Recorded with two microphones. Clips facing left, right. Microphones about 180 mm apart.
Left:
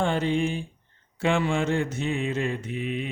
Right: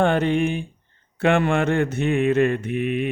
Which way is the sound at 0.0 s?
60° right (ahead or behind).